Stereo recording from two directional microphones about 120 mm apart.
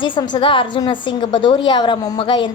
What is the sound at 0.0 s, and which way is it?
A woman's voice, 40° left (ahead or behind).